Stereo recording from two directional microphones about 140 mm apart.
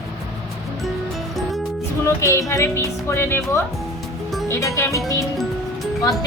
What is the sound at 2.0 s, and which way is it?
Speech, 20° left (ahead or behind).